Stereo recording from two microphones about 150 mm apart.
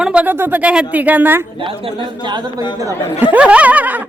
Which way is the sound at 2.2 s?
30° right (ahead or behind).